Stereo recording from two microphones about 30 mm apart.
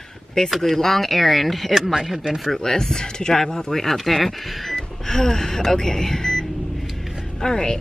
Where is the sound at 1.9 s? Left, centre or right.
Centre.